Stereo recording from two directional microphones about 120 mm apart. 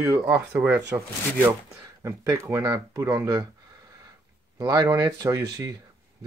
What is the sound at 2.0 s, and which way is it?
Speech, 25° right (ahead or behind).